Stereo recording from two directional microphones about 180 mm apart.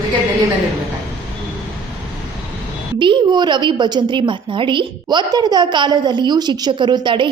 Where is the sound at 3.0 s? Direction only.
25° right (ahead or behind).